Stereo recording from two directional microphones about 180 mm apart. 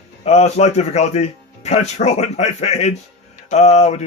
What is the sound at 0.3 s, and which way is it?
Speech, 35° left (ahead or behind).